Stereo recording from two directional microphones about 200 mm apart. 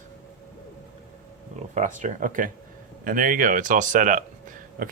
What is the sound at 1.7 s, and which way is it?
Speech, 35° right (ahead or behind).